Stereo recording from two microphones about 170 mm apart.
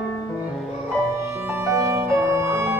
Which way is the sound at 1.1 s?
15° right (ahead or behind).